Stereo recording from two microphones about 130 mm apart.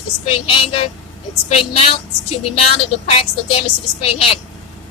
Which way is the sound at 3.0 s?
50° left (ahead or behind).